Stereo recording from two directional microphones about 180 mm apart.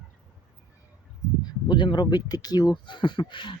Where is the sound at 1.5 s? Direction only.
25° left (ahead or behind).